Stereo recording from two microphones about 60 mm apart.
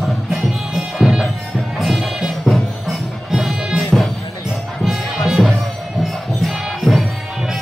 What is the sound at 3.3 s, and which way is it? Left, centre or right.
Music, centre.